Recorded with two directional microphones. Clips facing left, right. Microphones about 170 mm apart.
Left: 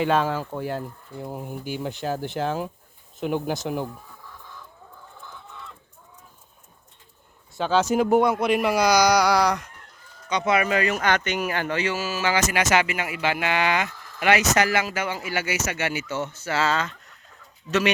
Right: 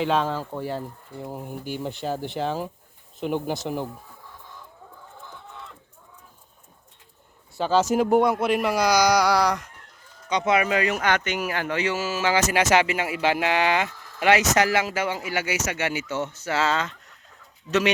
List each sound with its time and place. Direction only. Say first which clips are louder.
0.0 s speech: left 1 dB; 5° left (ahead or behind)
7.6 s speech: even; 5° right (ahead or behind)
10.2 s speech: even; 20° right (ahead or behind); by 11.8 s 5° right (ahead or behind)
11.8 s speech: right 1 dB; 20° right (ahead or behind)